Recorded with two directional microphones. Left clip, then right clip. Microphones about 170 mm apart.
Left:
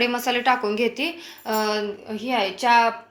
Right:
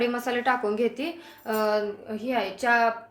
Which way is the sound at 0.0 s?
30° left (ahead or behind).